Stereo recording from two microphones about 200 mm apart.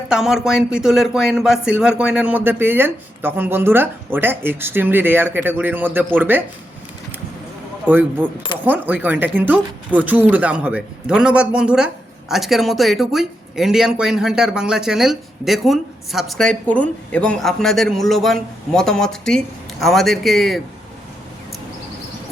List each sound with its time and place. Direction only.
0.1 s speech: 5° right (ahead or behind)
7.9 s speech: 10° right (ahead or behind)